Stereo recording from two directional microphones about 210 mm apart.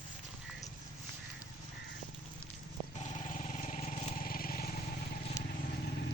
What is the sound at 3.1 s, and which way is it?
Vehicle, 35° left (ahead or behind).